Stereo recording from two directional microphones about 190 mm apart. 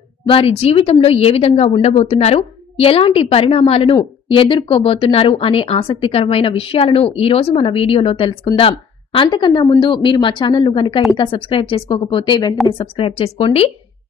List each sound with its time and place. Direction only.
0.2 s speech: 30° left (ahead or behind)